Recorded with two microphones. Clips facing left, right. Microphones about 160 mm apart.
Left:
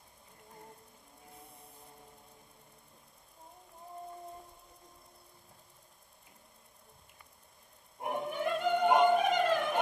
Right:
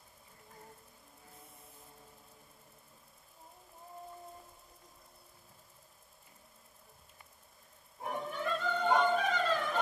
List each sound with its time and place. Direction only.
1.3 s printer: centre (ahead or behind)
8.0 s music: 15° left (ahead or behind)